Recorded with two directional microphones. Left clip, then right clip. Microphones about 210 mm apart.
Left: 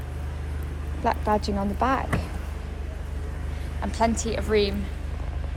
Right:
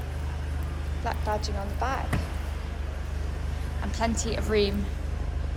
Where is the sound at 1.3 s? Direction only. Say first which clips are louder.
Left 4 dB; 40° left (ahead or behind).